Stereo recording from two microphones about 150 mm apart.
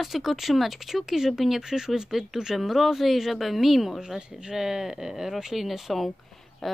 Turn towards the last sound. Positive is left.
turn(degrees=0)  # may be behind; listen again after turning